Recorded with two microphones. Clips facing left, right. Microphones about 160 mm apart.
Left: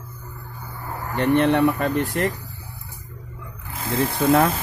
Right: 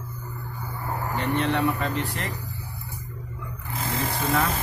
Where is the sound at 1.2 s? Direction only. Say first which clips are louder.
Left 8 dB; 55° left (ahead or behind).